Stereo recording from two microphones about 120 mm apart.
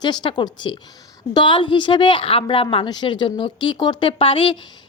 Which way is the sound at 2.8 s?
35° left (ahead or behind).